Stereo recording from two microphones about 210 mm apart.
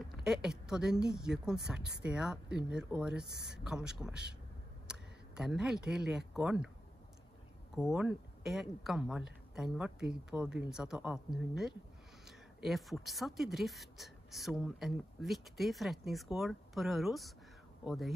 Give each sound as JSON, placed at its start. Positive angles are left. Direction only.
{"t": 0.1, "sound": "a woman's voice", "side_deg": 0}
{"t": 1.8, "sound": "speech", "side_deg": -55}
{"t": 2.0, "sound": "a woman's voice", "side_deg": -5}
{"t": 3.3, "sound": "speech", "side_deg": -55}
{"t": 3.5, "sound": "a woman's voice", "side_deg": -5}
{"t": 7.7, "sound": "a woman's voice", "side_deg": 0}